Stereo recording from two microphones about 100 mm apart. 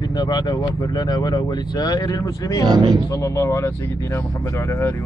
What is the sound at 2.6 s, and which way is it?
Speech, 45° right (ahead or behind).